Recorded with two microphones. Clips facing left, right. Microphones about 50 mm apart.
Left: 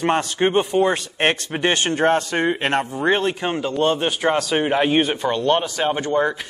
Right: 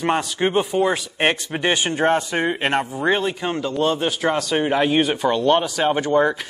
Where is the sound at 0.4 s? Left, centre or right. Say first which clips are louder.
Left 2 dB; centre.